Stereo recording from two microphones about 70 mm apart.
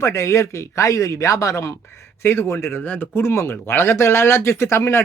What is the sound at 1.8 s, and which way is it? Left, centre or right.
Speech, left.